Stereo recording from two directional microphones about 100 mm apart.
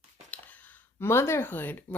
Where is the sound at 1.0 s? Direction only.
25° left (ahead or behind).